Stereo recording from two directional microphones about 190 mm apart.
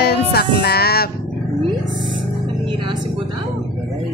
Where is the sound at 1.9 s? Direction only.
25° right (ahead or behind).